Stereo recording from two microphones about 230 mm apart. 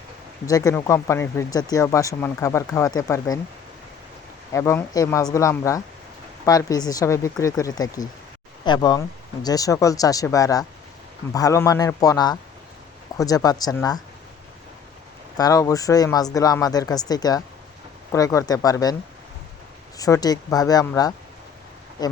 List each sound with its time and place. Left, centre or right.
0.4 s speech: centre
4.5 s speech: centre
15.4 s speech: centre
20.0 s speech: centre